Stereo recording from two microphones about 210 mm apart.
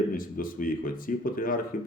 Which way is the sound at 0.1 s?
40° left (ahead or behind).